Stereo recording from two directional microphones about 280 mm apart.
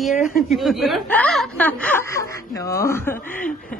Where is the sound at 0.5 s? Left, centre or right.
Centre.